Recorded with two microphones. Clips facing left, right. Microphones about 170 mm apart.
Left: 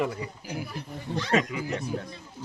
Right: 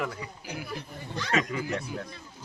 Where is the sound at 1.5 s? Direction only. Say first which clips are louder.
Even; 10° left (ahead or behind).